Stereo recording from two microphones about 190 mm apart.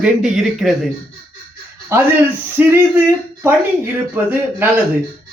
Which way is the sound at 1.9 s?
15° right (ahead or behind).